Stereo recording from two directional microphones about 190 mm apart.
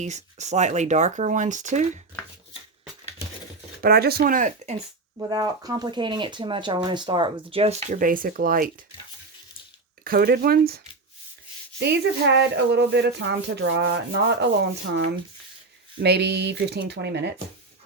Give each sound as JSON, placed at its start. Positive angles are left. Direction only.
{"t": 0.0, "sound": "speech", "side_deg": -40}
{"t": 3.8, "sound": "speech", "side_deg": -50}
{"t": 5.1, "sound": "speech", "side_deg": -20}
{"t": 10.0, "sound": "speech", "side_deg": -50}
{"t": 11.8, "sound": "speech", "side_deg": -60}
{"t": 16.0, "sound": "speech", "side_deg": -60}